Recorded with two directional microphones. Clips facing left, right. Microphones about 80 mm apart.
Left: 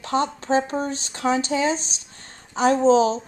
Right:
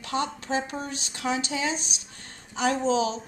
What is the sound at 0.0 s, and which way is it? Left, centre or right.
A woman's voice, left.